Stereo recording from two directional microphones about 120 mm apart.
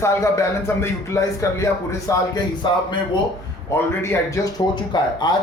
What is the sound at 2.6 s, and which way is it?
Speech, 40° left (ahead or behind).